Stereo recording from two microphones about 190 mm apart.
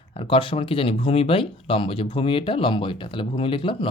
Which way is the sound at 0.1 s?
30° left (ahead or behind).